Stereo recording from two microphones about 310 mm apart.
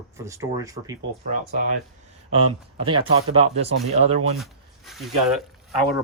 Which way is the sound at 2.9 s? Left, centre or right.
Centre.